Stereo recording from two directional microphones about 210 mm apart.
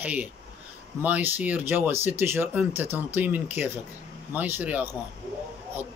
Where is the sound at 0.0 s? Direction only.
5° right (ahead or behind).